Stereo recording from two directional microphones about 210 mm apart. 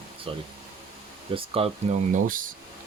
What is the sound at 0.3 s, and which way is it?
Speech, 25° right (ahead or behind).